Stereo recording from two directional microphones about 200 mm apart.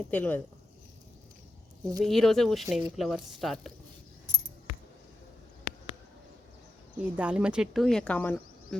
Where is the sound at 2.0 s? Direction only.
Centre (ahead or behind).